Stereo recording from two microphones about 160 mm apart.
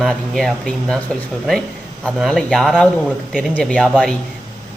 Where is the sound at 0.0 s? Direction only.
5° left (ahead or behind).